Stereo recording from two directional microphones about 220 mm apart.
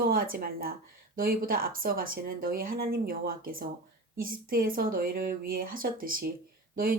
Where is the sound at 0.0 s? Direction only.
40° right (ahead or behind).